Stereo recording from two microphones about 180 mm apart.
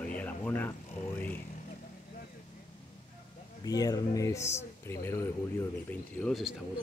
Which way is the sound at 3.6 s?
20° left (ahead or behind).